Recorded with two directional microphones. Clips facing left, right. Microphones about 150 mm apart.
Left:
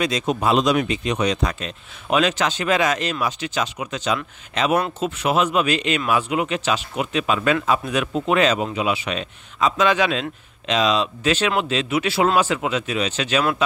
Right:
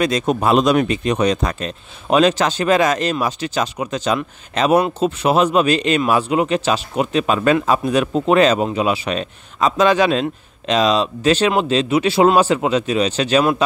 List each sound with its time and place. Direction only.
0.0 s speech: 50° right (ahead or behind)